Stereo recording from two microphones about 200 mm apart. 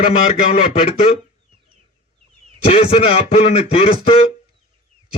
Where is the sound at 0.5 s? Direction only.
30° left (ahead or behind).